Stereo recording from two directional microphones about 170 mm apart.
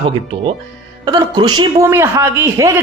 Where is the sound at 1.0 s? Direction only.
25° right (ahead or behind).